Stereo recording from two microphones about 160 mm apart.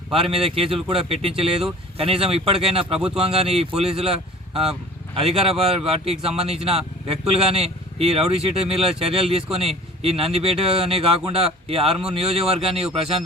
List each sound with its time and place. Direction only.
0.1 s speech: 35° right (ahead or behind)